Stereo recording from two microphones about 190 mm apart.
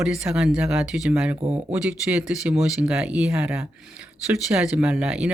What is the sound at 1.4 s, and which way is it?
Speech, 35° right (ahead or behind).